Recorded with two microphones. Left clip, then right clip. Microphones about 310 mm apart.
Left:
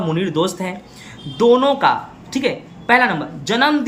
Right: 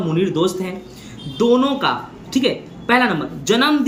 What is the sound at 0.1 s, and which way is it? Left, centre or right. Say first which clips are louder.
Speech: right 2 dB; centre.